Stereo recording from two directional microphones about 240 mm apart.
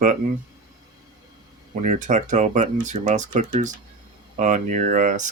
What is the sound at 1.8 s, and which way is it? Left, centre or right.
Speech, right.